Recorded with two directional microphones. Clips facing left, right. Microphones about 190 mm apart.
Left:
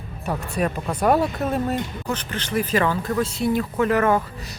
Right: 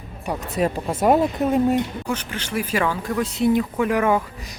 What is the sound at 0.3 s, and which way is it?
Speech, 20° right (ahead or behind).